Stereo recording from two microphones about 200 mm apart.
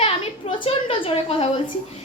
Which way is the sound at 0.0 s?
30° left (ahead or behind).